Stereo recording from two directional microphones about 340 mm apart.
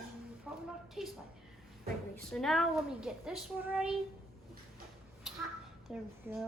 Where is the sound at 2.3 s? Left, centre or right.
Centre.